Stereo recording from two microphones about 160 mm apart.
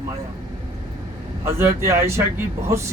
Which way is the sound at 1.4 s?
15° right (ahead or behind).